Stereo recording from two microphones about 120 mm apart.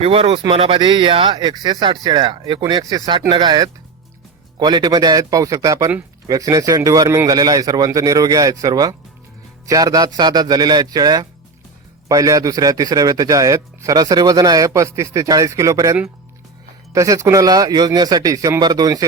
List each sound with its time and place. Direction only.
0.0 s a man's voice: 50° right (ahead or behind); by 19.0 s 30° right (ahead or behind)